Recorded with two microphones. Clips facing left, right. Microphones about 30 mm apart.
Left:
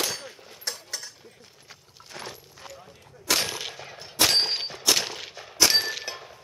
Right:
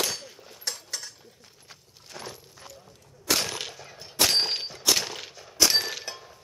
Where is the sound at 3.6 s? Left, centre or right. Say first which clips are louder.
Left 3 dB; left.